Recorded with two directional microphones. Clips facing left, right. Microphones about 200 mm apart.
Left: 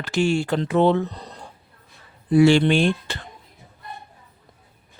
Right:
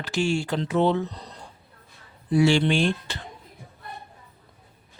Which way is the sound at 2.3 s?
55° left (ahead or behind).